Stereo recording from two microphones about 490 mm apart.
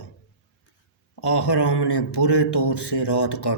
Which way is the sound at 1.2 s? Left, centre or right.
Left.